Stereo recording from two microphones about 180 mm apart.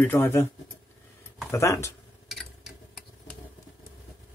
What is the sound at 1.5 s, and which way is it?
Speech, 15° left (ahead or behind).